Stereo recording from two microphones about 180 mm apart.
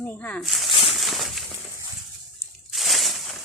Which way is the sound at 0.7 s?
30° left (ahead or behind).